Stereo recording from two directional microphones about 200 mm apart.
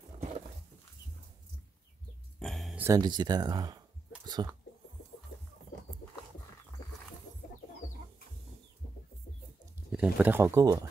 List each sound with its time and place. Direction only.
2.4 s a sound: centre (ahead or behind)
2.8 s speech: 20° right (ahead or behind)
9.9 s speech: 5° right (ahead or behind)